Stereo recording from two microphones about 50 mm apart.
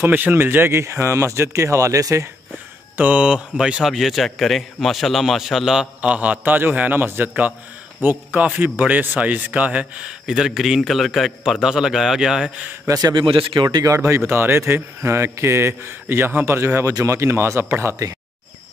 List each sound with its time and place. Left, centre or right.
0.0 s speech: right
0.7 s speech: right
3.0 s a man's voice: right
3.3 s a man's voice: centre
3.8 s a man's voice: centre
5.9 s a man's voice: right; by 12.5 s centre
13.8 s a man's voice: right
15.0 s a man's voice: right
16.5 s speech: right